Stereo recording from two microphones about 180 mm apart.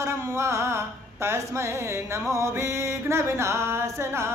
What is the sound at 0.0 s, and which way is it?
Mantra, 15° right (ahead or behind).